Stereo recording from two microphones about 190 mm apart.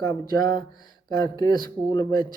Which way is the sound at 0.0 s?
20° left (ahead or behind).